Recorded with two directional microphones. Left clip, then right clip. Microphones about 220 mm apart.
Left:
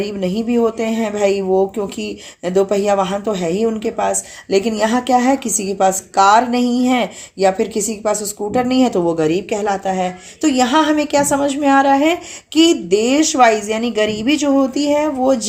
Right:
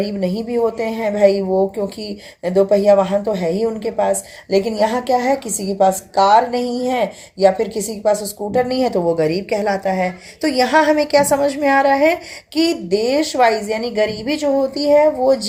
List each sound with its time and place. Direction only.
0.0 s speech: 30° left (ahead or behind)